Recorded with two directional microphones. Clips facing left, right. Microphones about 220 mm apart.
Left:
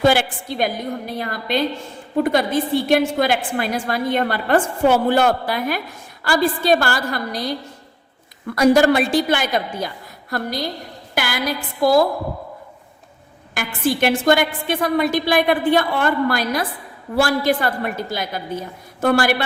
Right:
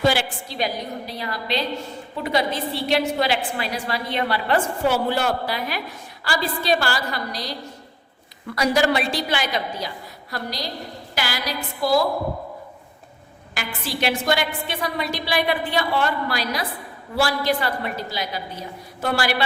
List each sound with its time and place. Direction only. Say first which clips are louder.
0.0 s a woman's voice: left 4 dB; 55° left (ahead or behind)
8.5 s a woman's voice: left 6 dB; 50° left (ahead or behind)
13.5 s a woman's voice: left 9 dB; 50° left (ahead or behind)